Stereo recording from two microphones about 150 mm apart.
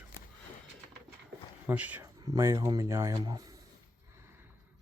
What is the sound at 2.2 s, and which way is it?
Speech, 25° right (ahead or behind).